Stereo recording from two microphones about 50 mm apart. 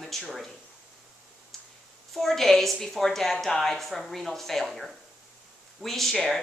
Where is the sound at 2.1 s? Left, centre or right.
Centre.